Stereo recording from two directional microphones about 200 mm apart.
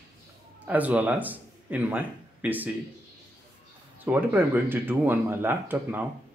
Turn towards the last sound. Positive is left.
turn(degrees=-10)  # may be behind; listen again after turning